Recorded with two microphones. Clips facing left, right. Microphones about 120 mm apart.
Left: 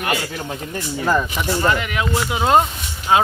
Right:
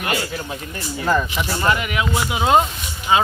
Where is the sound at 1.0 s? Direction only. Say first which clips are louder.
Even; 5° left (ahead or behind).